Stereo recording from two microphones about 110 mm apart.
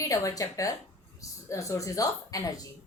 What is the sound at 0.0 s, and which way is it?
A woman's voice, 30° left (ahead or behind).